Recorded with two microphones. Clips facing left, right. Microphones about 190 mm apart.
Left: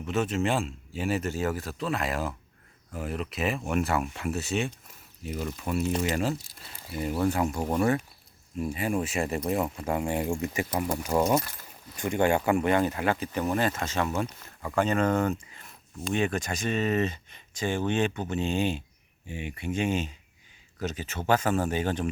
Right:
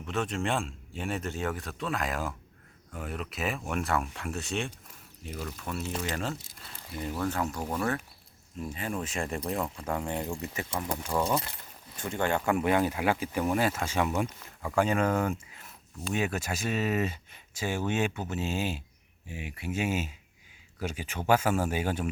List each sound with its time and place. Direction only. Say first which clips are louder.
0.1 s speech: left 4 dB; 5° left (ahead or behind)
12.5 s speech: left 2 dB; 5° right (ahead or behind)